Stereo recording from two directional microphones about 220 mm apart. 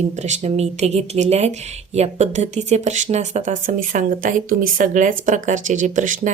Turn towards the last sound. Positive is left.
turn(degrees=-35)  # may be behind; listen again after turning